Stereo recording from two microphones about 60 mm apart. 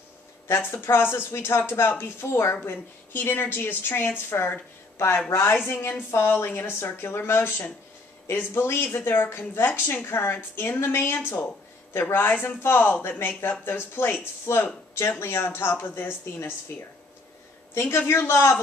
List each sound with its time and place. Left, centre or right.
0.5 s a woman's voice: left
18.0 s speech: left